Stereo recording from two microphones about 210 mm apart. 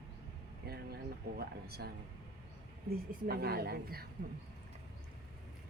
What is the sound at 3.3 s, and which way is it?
Speech, 50° right (ahead or behind).